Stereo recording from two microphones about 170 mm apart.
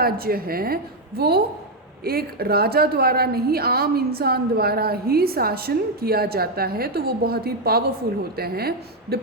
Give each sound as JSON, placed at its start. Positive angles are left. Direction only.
{"t": 0.0, "sound": "a woman's voice", "side_deg": -60}